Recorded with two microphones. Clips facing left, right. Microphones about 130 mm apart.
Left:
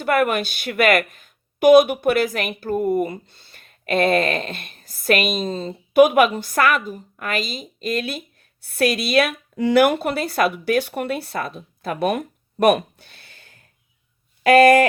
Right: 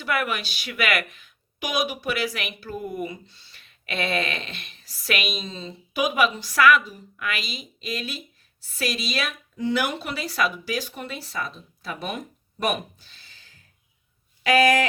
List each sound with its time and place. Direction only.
0.0 s a woman's voice: 50° left (ahead or behind)